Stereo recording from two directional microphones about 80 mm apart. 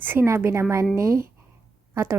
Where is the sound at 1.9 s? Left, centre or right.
Right.